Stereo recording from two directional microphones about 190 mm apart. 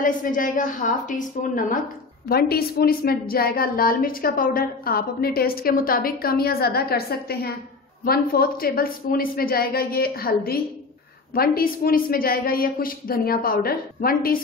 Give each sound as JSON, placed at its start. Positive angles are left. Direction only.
{"t": 0.0, "sound": "a woman's voice", "side_deg": 45}